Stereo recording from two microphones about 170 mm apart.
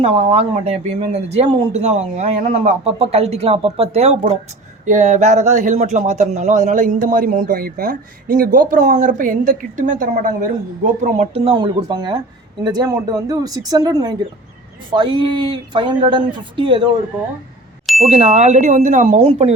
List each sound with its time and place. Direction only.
0.0 s speech: 35° right (ahead or behind)
17.8 s a sound: centre (ahead or behind)
18.1 s speech: 40° right (ahead or behind)